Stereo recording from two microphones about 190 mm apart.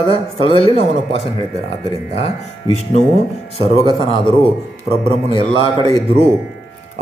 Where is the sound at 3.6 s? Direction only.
30° left (ahead or behind).